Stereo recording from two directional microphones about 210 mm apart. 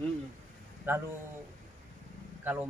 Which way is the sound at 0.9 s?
10° right (ahead or behind).